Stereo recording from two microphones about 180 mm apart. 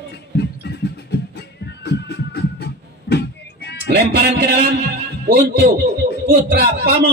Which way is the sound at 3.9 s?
65° right (ahead or behind).